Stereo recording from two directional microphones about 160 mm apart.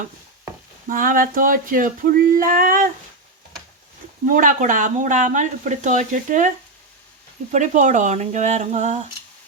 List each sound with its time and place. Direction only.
0.9 s a sound: 60° right (ahead or behind)
4.3 s speech: 55° right (ahead or behind)
7.5 s speech: 50° right (ahead or behind)